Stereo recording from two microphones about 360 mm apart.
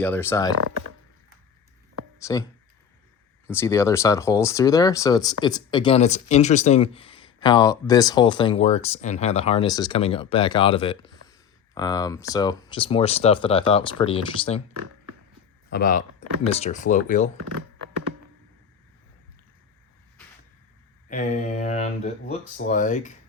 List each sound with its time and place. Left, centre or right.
0.0 s speech: centre
2.2 s speech: centre
15.7 s speech: left
17.3 s speech: right
21.1 s speech: left